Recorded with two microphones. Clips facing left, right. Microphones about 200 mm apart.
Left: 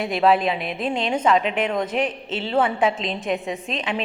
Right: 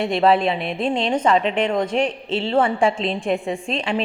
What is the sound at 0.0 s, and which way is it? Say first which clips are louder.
A woman's voice: right 2 dB; centre (ahead or behind).